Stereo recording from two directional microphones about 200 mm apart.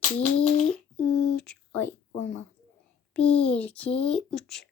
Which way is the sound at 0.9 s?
90° left.